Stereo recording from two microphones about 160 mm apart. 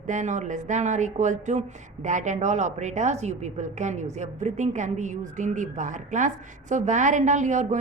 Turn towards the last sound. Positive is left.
turn(degrees=-50)  # may be behind; listen again after turning